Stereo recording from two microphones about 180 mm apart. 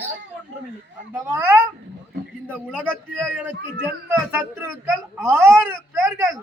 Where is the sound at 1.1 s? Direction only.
10° right (ahead or behind).